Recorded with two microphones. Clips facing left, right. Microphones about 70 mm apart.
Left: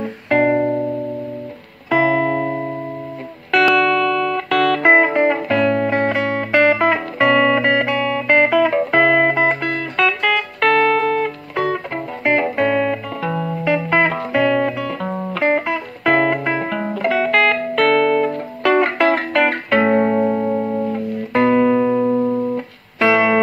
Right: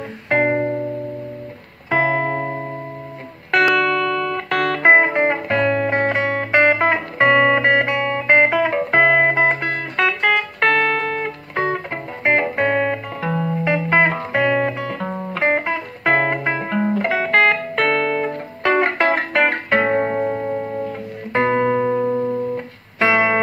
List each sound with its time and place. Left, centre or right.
0.3 s music: right
1.9 s music: right
3.7 s music: right
13.3 s music: centre
13.7 s music: right